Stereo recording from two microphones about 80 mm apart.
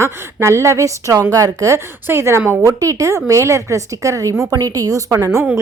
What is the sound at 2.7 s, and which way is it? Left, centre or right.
Speech, right.